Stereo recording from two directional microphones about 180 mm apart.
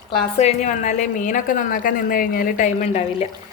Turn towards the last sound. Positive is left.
turn(degrees=40)  # may be behind; listen again after turning